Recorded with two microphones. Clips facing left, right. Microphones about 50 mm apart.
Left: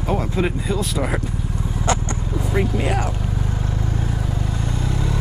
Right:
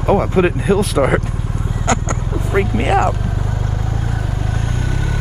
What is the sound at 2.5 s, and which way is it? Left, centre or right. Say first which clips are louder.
Speech: right 6 dB; right.